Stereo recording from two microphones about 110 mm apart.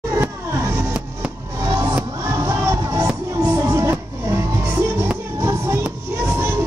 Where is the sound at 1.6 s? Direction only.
30° right (ahead or behind).